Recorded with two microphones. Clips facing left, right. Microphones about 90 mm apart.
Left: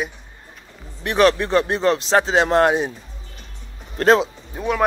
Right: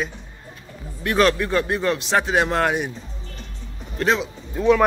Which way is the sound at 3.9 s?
40° left (ahead or behind).